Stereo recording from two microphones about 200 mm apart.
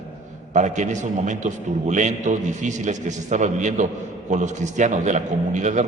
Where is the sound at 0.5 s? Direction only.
35° right (ahead or behind).